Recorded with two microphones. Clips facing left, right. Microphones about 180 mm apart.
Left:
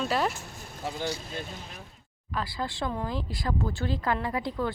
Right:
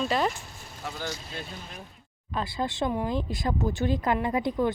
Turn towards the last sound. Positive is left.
turn(degrees=-20)  # may be behind; listen again after turning